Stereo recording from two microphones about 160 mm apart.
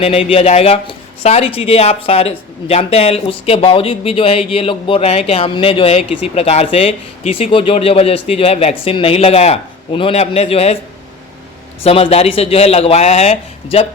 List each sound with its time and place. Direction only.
0.0 s speech: 40° left (ahead or behind)
11.8 s speech: 35° left (ahead or behind)